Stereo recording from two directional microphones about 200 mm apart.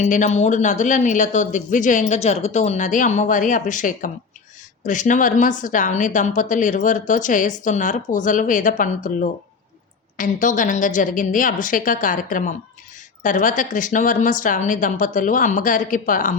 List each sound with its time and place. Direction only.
0.0 s a woman's voice: 35° left (ahead or behind)